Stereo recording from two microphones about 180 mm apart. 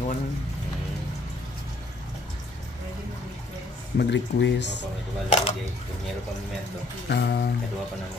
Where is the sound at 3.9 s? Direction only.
80° left.